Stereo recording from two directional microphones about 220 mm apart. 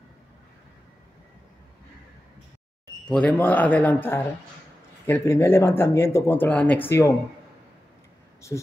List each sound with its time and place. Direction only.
3.1 s speech: 5° left (ahead or behind)
8.5 s speech: 15° left (ahead or behind)